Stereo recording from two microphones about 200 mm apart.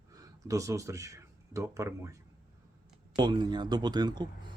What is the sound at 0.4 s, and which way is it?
Speech, 15° right (ahead or behind).